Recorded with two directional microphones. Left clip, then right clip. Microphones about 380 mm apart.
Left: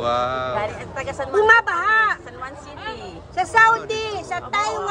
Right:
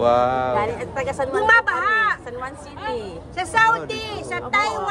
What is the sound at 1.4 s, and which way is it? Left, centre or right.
Speech, centre.